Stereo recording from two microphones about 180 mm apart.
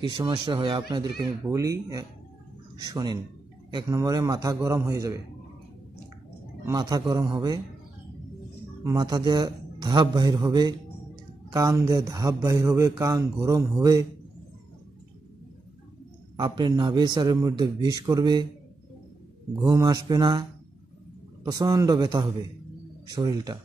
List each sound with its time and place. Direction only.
0.0 s a man's voice: 25° right (ahead or behind)
6.6 s speech: 20° right (ahead or behind)
8.8 s speech: 25° right (ahead or behind)
16.3 s speech: 25° right (ahead or behind)
19.5 s speech: 20° right (ahead or behind)
21.5 s speech: 20° right (ahead or behind)